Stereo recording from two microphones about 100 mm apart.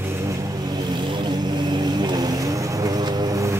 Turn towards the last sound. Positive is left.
turn(degrees=-35)  # may be behind; listen again after turning